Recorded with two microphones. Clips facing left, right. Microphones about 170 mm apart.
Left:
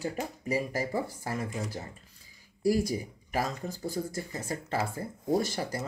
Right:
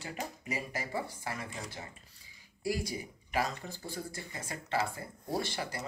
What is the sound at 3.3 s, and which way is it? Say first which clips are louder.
Speech: left 2 dB; 45° left (ahead or behind).